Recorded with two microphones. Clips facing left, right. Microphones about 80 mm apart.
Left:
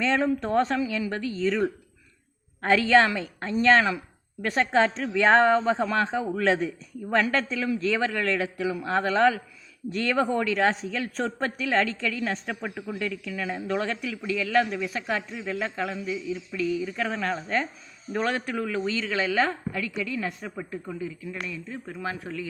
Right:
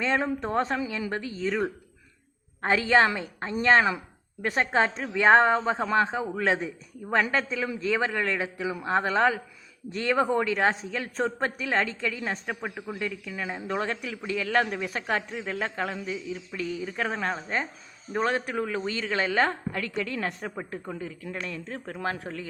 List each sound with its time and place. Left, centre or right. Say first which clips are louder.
0.0 s a woman's voice: left 2 dB; right